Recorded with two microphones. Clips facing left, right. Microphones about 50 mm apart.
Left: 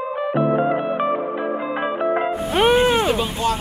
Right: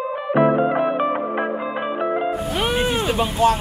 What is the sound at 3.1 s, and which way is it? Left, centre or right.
Speech, right.